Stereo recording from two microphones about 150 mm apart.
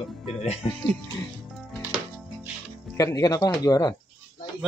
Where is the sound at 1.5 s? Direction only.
Centre (ahead or behind).